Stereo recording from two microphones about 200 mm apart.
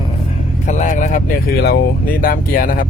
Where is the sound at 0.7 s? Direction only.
40° left (ahead or behind).